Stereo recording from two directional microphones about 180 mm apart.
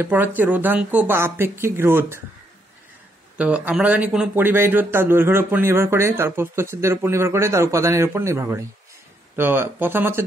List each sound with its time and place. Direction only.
0.0 s speech: 10° right (ahead or behind)
3.3 s speech: 5° right (ahead or behind)